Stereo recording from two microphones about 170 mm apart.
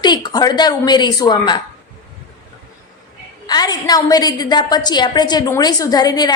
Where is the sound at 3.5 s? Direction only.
25° left (ahead or behind).